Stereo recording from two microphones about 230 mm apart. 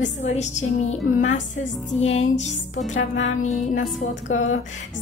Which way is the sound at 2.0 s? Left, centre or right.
Left.